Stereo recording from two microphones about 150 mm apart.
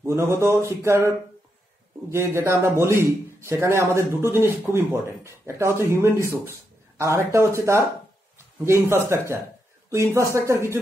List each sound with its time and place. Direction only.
0.0 s a man's voice: 15° right (ahead or behind)
2.0 s a man's voice: 20° right (ahead or behind)